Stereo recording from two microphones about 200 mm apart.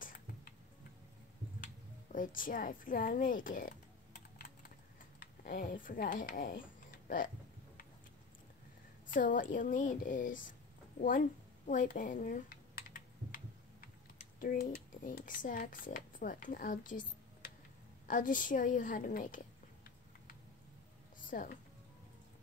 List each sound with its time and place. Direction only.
0.0 s tick-tock: 45° left (ahead or behind)
2.1 s speech: 40° left (ahead or behind)
9.1 s speech: 40° left (ahead or behind)
11.0 s a sound: 45° left (ahead or behind)
21.2 s speech: 40° left (ahead or behind)